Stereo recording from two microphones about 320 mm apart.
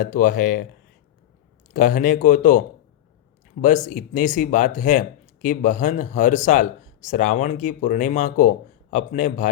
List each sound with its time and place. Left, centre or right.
0.0 s speech: left
1.7 s speech: left